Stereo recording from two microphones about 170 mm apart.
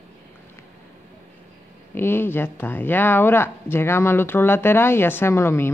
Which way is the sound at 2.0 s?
15° left (ahead or behind).